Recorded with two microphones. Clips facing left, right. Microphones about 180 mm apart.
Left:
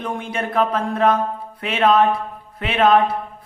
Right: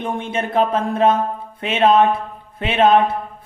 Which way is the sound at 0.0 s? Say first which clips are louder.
Right 2 dB; 25° right (ahead or behind).